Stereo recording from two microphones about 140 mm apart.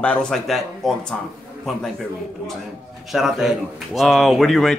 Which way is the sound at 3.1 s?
5° right (ahead or behind).